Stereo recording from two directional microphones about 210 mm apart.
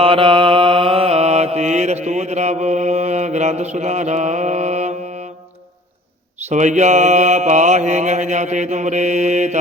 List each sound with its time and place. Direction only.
0.0 s mantra: 25° right (ahead or behind)
6.5 s mantra: 35° right (ahead or behind)